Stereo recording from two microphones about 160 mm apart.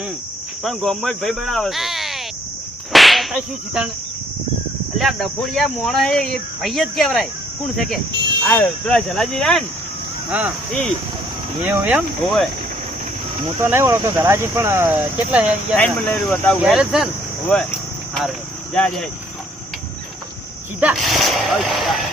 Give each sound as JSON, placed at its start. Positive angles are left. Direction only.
{"t": 0.6, "sound": "speech", "side_deg": 0}
{"t": 4.9, "sound": "speech", "side_deg": 0}
{"t": 11.6, "sound": "speech", "side_deg": -10}
{"t": 13.6, "sound": "speech", "side_deg": -15}
{"t": 15.8, "sound": "speech", "side_deg": 10}
{"t": 16.6, "sound": "speech", "side_deg": -5}
{"t": 18.7, "sound": "speech", "side_deg": 5}
{"t": 20.8, "sound": "speech", "side_deg": 0}